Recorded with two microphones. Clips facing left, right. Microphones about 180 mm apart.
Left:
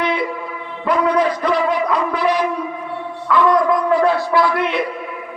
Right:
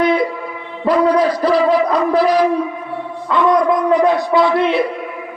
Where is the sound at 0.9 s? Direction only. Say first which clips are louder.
Right 3 dB; 35° right (ahead or behind).